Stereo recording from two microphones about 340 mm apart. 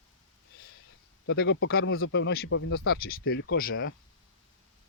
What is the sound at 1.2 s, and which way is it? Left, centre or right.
Speech, left.